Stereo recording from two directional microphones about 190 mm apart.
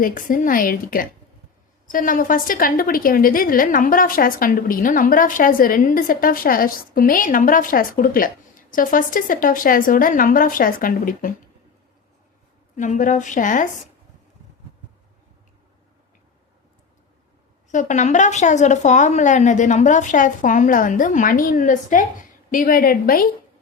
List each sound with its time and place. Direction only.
0.0 s a woman's voice: 45° left (ahead or behind)
12.7 s speech: 40° left (ahead or behind)
17.7 s speech: 40° left (ahead or behind)